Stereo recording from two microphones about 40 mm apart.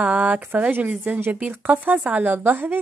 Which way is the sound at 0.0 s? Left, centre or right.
Right.